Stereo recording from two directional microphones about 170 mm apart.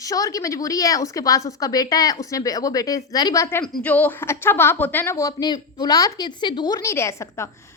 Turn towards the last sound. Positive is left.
turn(degrees=15)  # may be behind; listen again after turning